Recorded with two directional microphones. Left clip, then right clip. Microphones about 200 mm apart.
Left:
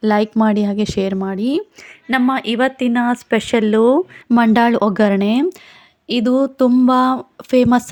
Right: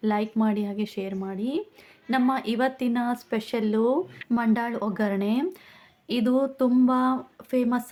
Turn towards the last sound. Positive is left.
turn(degrees=45)  # may be behind; listen again after turning